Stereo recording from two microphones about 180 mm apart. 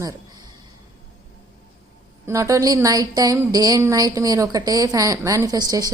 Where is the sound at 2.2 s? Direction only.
15° right (ahead or behind).